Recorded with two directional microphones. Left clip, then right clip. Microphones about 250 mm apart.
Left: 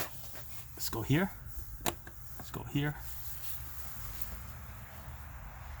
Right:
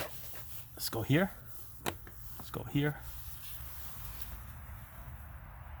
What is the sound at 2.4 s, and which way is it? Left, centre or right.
Speech, right.